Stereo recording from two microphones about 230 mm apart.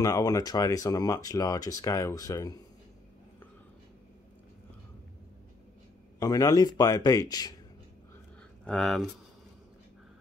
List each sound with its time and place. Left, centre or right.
0.0 s speech: centre
6.1 s speech: centre
8.6 s speech: centre